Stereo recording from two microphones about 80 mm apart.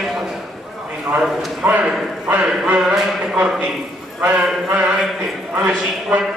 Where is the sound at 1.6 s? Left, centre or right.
Centre.